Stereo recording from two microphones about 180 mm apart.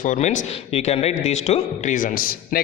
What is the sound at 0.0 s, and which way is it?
A man's voice, 40° left (ahead or behind).